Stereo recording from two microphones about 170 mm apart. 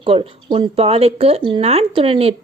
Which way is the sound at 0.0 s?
30° right (ahead or behind).